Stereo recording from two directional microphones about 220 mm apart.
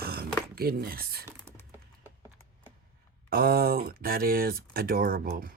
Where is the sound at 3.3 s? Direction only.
45° right (ahead or behind).